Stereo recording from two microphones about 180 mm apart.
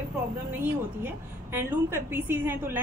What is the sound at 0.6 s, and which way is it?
A woman's voice, 10° right (ahead or behind).